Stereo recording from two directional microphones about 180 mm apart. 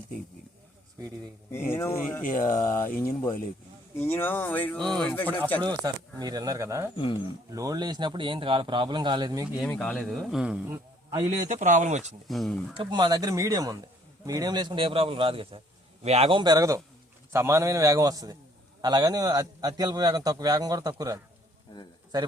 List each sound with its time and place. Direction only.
1.7 s speech: 15° left (ahead or behind)
2.2 s speech: 50° left (ahead or behind)
2.6 s speech: 15° left (ahead or behind)
5.6 s a man's voice: 20° right (ahead or behind)
6.9 s speech: 30° left (ahead or behind)
7.5 s a man's voice: 20° right (ahead or behind)
9.6 s speech: 5° left (ahead or behind)
11.4 s speech: 45° right (ahead or behind)
12.3 s speech: centre (ahead or behind)
12.7 s a man's voice: 25° right (ahead or behind)